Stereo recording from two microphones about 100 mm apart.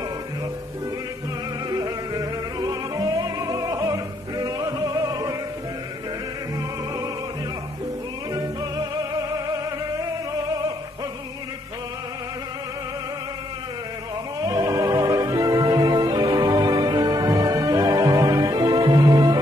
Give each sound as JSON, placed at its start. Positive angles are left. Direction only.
{"t": 1.7, "sound": "music", "side_deg": -40}
{"t": 9.5, "sound": "opera", "side_deg": -40}
{"t": 14.4, "sound": "music", "side_deg": -40}